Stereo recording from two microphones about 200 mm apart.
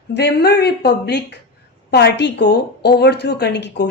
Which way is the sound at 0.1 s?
60° left (ahead or behind).